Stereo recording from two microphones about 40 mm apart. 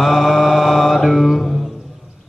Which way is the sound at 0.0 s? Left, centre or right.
Centre.